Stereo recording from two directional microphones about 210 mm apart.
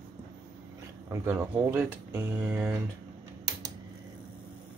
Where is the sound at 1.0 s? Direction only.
10° right (ahead or behind).